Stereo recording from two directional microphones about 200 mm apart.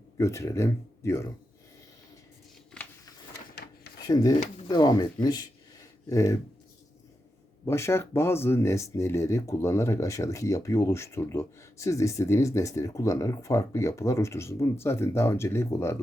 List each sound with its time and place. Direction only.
0.2 s speech: 15° left (ahead or behind)
2.7 s a sound: 5° left (ahead or behind)
4.0 s speech: 20° left (ahead or behind)
7.6 s speech: 15° left (ahead or behind)